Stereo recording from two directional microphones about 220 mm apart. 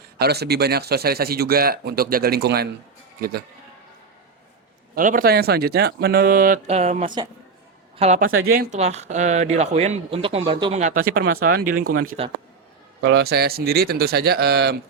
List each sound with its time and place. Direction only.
0.2 s a man's voice: 45° right (ahead or behind)
4.9 s speech: 40° right (ahead or behind)
12.2 s a man's voice: 25° right (ahead or behind)
13.0 s a man's voice: 50° right (ahead or behind)